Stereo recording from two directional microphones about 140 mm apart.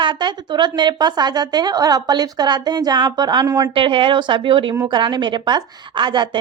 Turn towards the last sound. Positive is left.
turn(degrees=-35)  # may be behind; listen again after turning